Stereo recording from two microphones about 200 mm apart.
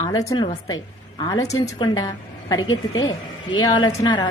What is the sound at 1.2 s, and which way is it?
A woman's voice, 15° left (ahead or behind).